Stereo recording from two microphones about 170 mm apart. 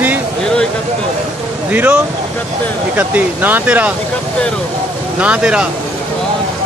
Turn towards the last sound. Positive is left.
turn(degrees=-5)  # may be behind; listen again after turning